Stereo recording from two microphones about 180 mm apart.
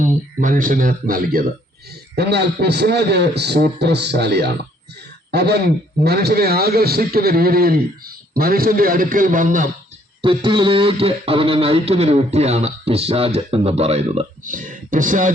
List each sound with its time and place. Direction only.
0.0 s speech: 45° right (ahead or behind)
2.1 s a man's voice: 65° right (ahead or behind); by 9.6 s 45° right (ahead or behind)
10.2 s speech: 25° right (ahead or behind); by 15.3 s 45° right (ahead or behind)